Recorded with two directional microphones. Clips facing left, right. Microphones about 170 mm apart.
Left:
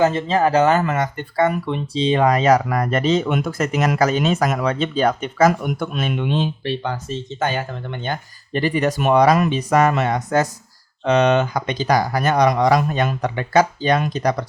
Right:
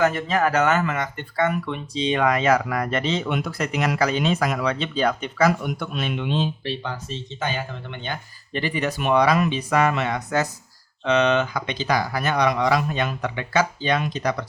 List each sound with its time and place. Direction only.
0.0 s speech: 25° left (ahead or behind)